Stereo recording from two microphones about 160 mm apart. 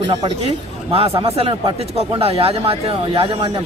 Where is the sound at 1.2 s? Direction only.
35° right (ahead or behind).